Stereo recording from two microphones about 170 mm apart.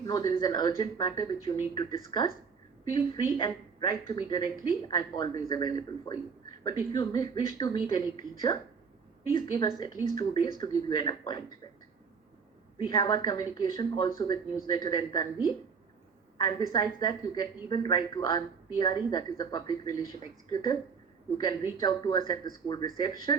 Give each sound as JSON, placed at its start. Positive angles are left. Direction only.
{"t": 0.1, "sound": "speech", "side_deg": 25}
{"t": 12.8, "sound": "speech", "side_deg": 30}
{"t": 16.4, "sound": "speech", "side_deg": 25}
{"t": 21.3, "sound": "speech", "side_deg": 25}